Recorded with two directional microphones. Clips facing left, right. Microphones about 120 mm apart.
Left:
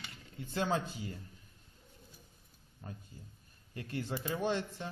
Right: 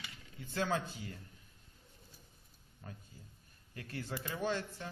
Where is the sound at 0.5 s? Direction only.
20° left (ahead or behind).